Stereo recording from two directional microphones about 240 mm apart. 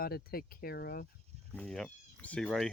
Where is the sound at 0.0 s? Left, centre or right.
Left.